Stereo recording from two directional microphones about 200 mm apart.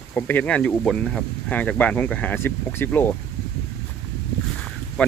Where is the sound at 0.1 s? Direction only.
10° left (ahead or behind).